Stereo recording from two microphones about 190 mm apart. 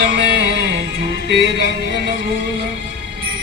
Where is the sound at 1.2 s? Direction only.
65° right (ahead or behind).